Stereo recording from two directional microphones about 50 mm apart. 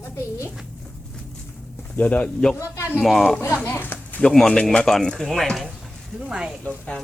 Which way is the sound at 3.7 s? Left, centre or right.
Left.